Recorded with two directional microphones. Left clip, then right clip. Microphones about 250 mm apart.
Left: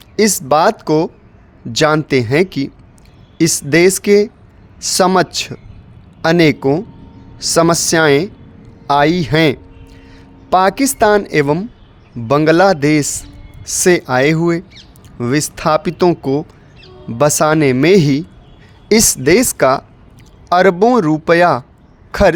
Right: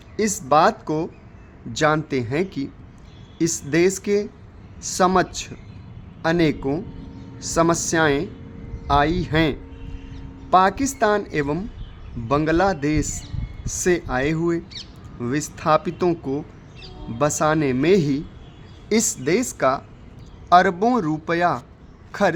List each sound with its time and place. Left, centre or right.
0.2 s speech: left